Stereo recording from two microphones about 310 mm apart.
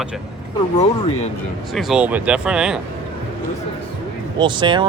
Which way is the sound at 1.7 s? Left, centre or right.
Centre.